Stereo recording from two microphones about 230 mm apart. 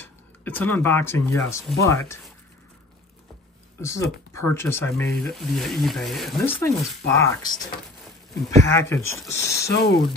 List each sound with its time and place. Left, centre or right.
0.0 s speech: centre
3.8 s speech: centre
8.6 s speech: centre
9.7 s speech: left